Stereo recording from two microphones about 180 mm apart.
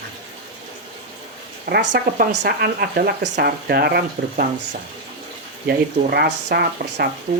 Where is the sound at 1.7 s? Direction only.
70° right (ahead or behind).